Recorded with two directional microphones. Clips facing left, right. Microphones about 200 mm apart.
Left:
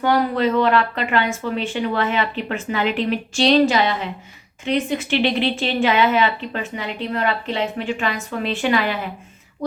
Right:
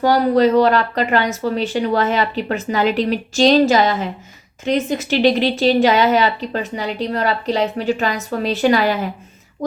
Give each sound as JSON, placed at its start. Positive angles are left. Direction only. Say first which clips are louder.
{"t": 0.0, "sound": "a woman's voice", "louder": "right 5 dB", "side_deg": -40}